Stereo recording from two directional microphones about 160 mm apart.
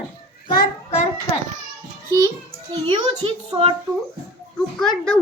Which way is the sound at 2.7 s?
30° right (ahead or behind).